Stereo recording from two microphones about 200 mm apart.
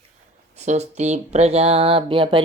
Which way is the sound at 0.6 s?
35° right (ahead or behind).